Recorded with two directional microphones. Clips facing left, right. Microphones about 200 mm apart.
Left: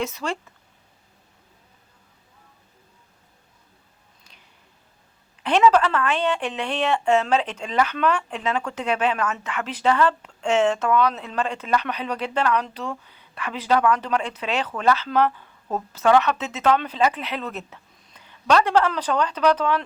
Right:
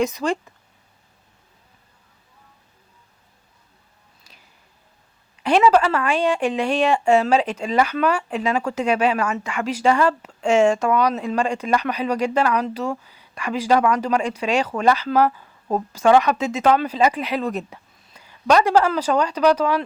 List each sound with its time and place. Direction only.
0.0 s a woman's voice: 15° right (ahead or behind)
5.4 s a woman's voice: 10° right (ahead or behind)